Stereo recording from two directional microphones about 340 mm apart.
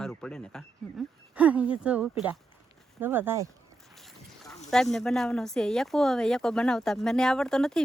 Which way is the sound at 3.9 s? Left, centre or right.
Centre.